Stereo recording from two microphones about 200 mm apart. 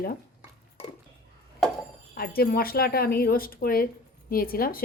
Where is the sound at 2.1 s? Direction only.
50° left (ahead or behind).